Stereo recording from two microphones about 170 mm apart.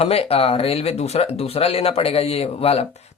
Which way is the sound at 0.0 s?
35° left (ahead or behind).